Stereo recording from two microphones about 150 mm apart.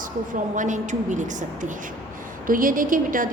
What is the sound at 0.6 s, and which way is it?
A woman's voice, 55° right (ahead or behind).